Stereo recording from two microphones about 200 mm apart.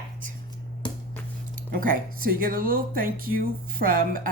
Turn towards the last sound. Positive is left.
turn(degrees=-45)  # may be behind; listen again after turning